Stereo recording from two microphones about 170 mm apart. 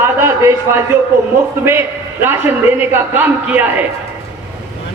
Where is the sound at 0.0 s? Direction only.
15° right (ahead or behind).